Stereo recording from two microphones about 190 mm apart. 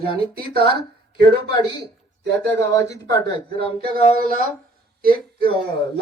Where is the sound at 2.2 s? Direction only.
65° right (ahead or behind).